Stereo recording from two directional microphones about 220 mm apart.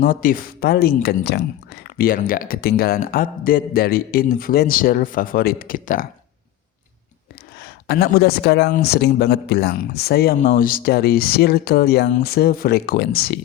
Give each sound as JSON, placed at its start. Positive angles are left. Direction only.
{"t": 0.0, "sound": "speech", "side_deg": 40}
{"t": 7.6, "sound": "speech", "side_deg": 45}